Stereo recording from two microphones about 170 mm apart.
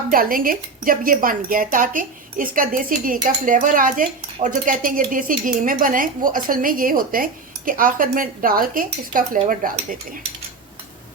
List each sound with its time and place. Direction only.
0.1 s speech: 55° right (ahead or behind)